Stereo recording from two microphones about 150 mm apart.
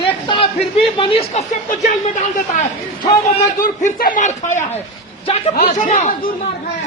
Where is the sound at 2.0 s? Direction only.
50° left (ahead or behind).